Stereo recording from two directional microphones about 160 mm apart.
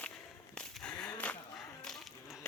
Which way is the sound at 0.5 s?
5° left (ahead or behind).